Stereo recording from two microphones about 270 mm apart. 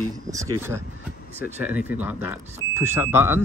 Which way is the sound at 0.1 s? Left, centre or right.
Centre.